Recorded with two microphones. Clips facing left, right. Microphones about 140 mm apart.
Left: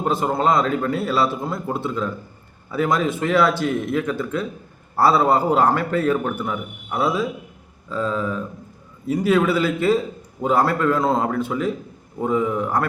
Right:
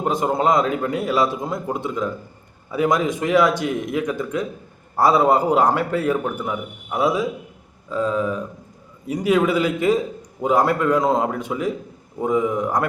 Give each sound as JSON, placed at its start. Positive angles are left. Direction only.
{"t": 0.0, "sound": "a man's voice", "side_deg": -15}